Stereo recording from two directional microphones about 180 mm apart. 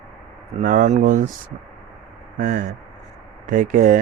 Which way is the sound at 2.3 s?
50° right (ahead or behind).